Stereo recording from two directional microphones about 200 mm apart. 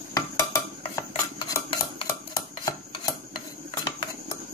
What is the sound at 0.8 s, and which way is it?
Cutlery, 20° left (ahead or behind).